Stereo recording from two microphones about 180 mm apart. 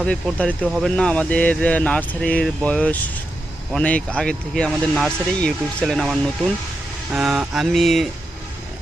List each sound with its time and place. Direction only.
0.0 s speech: 5° left (ahead or behind)